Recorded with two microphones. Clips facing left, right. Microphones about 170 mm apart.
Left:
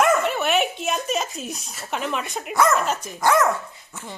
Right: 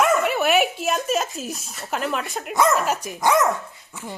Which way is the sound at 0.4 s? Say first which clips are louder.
Right 2 dB; centre (ahead or behind).